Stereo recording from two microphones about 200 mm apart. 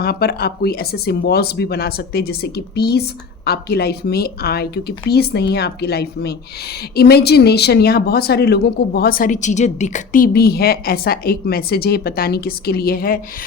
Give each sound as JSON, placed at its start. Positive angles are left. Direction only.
{"t": 0.0, "sound": "speech", "side_deg": 50}